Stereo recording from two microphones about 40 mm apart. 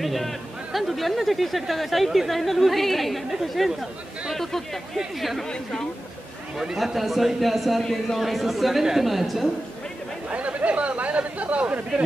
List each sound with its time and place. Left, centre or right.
0.0 s speech: centre
4.9 s speech: centre
5.5 s speech: centre
6.7 s speech: centre
10.3 s speech: right